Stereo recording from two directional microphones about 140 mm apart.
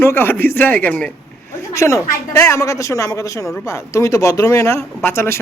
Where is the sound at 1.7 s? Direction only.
20° left (ahead or behind).